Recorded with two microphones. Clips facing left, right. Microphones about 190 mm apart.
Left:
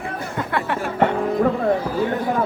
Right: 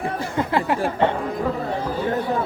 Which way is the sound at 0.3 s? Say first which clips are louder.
Right 3 dB; 25° right (ahead or behind).